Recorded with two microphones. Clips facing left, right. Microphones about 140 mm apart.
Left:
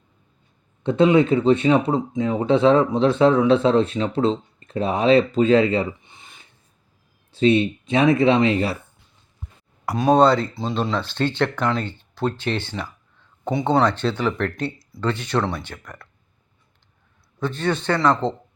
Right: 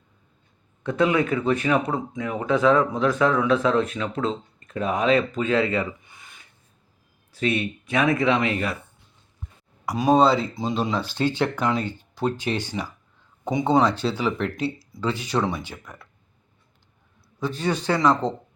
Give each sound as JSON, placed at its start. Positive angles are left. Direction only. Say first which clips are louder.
{"t": 0.9, "sound": "speech", "louder": "left 5 dB", "side_deg": 25}
{"t": 9.8, "sound": "speech", "louder": "left 2 dB", "side_deg": -5}
{"t": 17.4, "sound": "speech", "louder": "left 2 dB", "side_deg": -10}